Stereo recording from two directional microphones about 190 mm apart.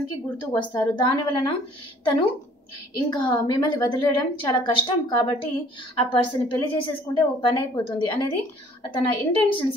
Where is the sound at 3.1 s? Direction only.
20° left (ahead or behind).